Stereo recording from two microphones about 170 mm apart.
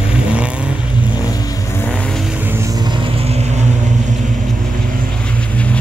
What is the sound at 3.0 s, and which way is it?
Vehicle, 40° right (ahead or behind).